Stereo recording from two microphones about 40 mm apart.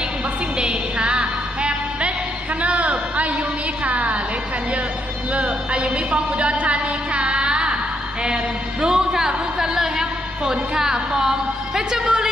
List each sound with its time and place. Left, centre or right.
0.6 s music: right
2.6 s a sound: right
5.3 s a woman's voice: right
8.8 s a woman's voice: centre